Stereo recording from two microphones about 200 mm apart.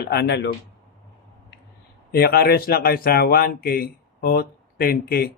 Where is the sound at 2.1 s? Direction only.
50° left (ahead or behind).